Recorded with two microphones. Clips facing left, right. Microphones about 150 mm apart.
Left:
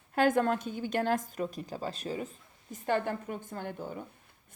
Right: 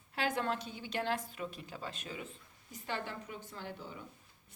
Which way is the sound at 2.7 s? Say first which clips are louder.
Left 10 dB; 50° left (ahead or behind).